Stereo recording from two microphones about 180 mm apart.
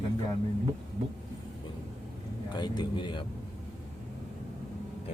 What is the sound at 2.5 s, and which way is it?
Speech, 25° left (ahead or behind).